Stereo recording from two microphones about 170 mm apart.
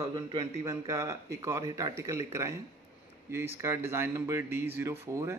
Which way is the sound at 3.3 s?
15° right (ahead or behind).